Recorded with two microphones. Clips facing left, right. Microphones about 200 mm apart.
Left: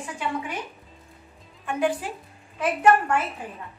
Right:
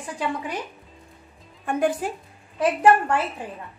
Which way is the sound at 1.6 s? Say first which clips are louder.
Right 2 dB; 45° right (ahead or behind).